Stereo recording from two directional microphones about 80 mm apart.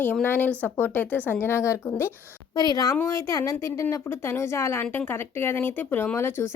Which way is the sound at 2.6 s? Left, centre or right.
Left.